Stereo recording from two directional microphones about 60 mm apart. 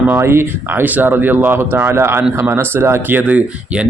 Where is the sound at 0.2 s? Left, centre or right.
Right.